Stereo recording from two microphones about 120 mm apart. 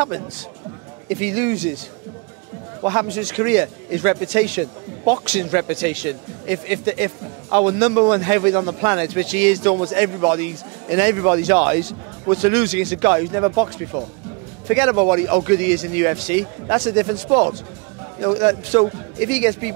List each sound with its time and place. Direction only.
1.0 s speech: 20° right (ahead or behind)
2.8 s speech: 25° right (ahead or behind)